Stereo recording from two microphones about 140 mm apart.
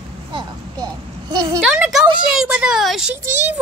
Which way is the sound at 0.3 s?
35° right (ahead or behind).